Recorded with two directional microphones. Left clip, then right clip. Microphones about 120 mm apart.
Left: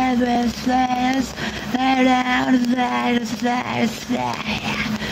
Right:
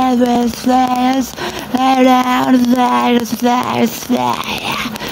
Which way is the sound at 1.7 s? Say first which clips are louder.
Right 7 dB; 45° right (ahead or behind).